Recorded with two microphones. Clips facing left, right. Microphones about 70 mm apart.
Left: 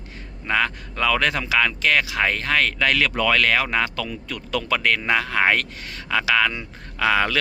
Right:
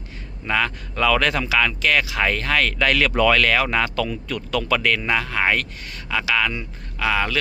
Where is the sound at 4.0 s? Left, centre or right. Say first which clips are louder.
Right 5 dB; centre.